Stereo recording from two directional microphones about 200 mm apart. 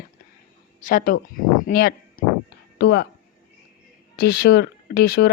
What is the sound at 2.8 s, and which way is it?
Speech, 55° left (ahead or behind).